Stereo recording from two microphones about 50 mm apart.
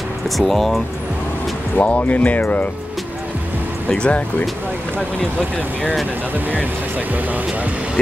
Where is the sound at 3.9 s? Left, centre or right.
Left.